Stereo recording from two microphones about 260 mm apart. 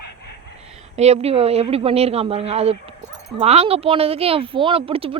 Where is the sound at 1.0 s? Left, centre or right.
Right.